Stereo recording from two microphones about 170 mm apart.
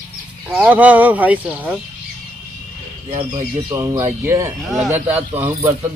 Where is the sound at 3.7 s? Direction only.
15° right (ahead or behind).